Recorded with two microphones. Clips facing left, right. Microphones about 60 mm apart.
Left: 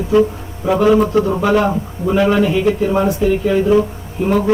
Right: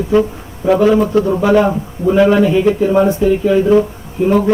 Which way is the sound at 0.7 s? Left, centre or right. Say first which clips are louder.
Right 2 dB; centre.